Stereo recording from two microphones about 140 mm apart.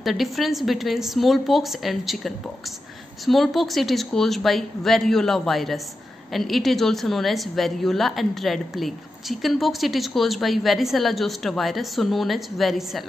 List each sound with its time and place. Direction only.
0.0 s a woman's voice: centre (ahead or behind)